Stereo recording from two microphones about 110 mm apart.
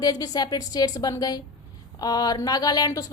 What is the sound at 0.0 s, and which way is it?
A woman's voice, 35° left (ahead or behind).